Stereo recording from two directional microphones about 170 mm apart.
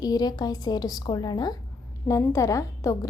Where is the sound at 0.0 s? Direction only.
25° left (ahead or behind).